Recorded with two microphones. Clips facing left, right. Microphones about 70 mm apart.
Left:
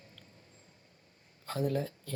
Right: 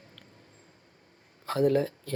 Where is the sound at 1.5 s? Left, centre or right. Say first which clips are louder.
Right 8 dB; right.